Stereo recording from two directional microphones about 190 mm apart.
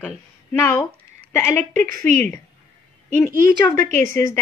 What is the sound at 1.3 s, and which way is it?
A woman's voice, 15° left (ahead or behind).